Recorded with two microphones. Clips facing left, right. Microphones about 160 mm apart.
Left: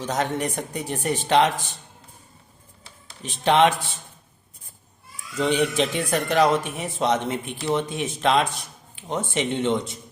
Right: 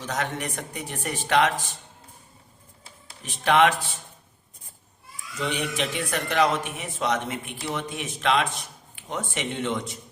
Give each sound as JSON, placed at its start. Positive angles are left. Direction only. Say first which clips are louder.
{"t": 0.0, "sound": "speech", "louder": "left 5 dB", "side_deg": 30}
{"t": 3.4, "sound": "a man's voice", "louder": "left 2 dB", "side_deg": 25}
{"t": 5.4, "sound": "a man's voice", "louder": "left 7 dB", "side_deg": 30}